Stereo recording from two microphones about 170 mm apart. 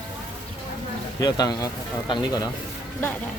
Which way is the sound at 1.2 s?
20° left (ahead or behind).